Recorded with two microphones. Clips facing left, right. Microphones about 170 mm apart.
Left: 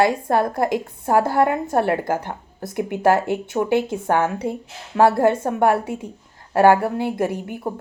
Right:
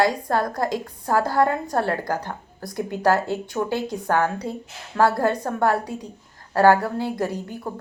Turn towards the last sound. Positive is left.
turn(degrees=20)  # may be behind; listen again after turning